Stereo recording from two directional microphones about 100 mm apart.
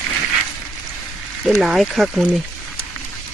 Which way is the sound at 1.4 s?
Centre (ahead or behind).